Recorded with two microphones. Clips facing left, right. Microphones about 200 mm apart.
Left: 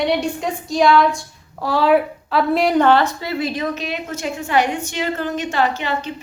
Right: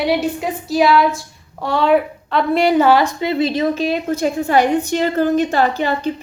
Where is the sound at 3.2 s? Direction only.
25° right (ahead or behind).